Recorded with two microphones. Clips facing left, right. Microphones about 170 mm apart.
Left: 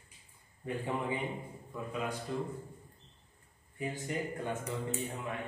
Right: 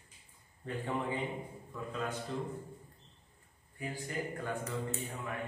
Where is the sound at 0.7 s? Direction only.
15° left (ahead or behind).